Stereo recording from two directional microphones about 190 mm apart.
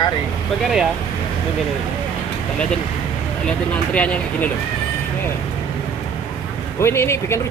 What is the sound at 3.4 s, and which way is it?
Speech, 5° left (ahead or behind).